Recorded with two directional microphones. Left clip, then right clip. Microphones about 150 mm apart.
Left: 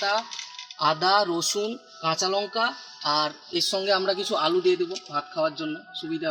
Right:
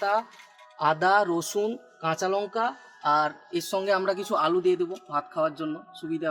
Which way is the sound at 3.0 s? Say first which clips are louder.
Right 2 dB; 30° right (ahead or behind).